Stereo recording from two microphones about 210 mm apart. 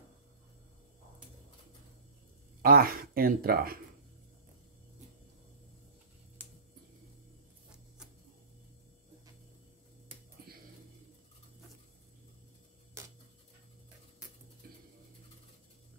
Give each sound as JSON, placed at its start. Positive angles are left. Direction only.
{"t": 2.6, "sound": "speech", "side_deg": -45}
{"t": 13.0, "sound": "tick-tock", "side_deg": -15}